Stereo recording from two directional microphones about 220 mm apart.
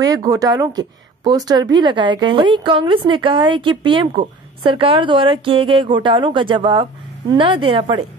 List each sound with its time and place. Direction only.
0.0 s a woman's voice: 15° right (ahead or behind)